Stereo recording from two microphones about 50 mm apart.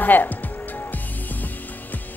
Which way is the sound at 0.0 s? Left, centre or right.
Left.